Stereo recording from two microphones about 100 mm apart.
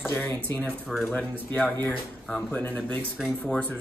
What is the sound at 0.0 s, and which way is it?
Speech, 20° left (ahead or behind).